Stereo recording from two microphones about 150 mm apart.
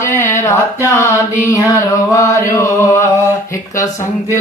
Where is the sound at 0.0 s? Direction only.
15° left (ahead or behind).